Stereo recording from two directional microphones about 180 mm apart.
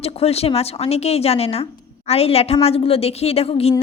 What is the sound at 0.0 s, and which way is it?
A woman's voice, 35° left (ahead or behind).